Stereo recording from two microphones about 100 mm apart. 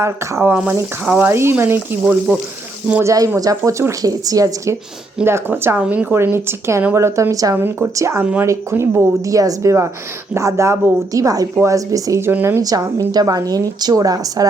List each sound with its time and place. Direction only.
0.0 s speech: 25° right (ahead or behind)
3.0 s speech: 30° right (ahead or behind)
7.5 s speech: 20° right (ahead or behind)
8.2 s speech: 10° right (ahead or behind)
8.4 s speech: 25° right (ahead or behind)
12.6 s speech: 40° right (ahead or behind)